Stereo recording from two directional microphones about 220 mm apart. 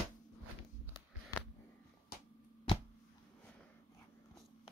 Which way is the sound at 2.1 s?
45° left (ahead or behind).